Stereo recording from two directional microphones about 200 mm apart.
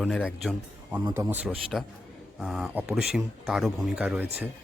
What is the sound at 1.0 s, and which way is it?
Speech, 15° right (ahead or behind).